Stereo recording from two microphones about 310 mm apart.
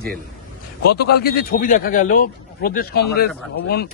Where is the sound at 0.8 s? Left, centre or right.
Left.